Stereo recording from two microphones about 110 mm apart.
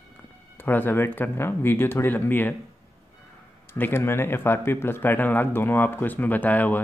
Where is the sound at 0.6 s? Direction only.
20° left (ahead or behind).